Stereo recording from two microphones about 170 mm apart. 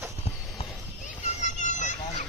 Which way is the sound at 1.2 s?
45° left (ahead or behind).